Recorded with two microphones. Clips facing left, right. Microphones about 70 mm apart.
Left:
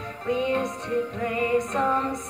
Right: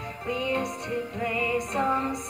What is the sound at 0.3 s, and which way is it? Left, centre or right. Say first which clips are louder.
Music: left 4 dB; left.